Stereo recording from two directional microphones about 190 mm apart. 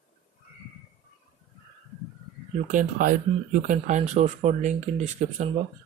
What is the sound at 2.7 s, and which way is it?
Speech, 45° right (ahead or behind).